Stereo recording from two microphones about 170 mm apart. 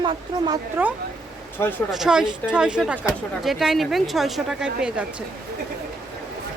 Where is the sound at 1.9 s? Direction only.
5° right (ahead or behind).